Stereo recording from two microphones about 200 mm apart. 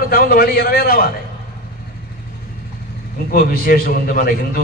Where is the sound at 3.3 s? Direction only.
45° left (ahead or behind).